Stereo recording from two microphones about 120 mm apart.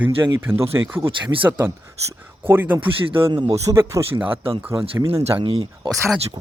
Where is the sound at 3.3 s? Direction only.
40° right (ahead or behind).